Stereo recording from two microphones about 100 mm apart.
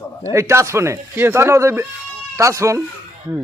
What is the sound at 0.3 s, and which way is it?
A man's voice, 30° right (ahead or behind).